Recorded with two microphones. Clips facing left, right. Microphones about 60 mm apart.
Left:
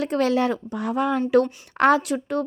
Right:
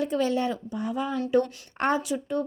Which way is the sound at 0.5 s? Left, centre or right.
Left.